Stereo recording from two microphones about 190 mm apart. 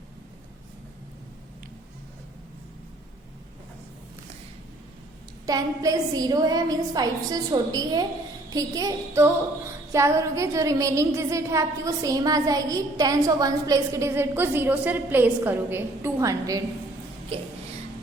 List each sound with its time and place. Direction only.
5.5 s a woman's voice: 20° right (ahead or behind)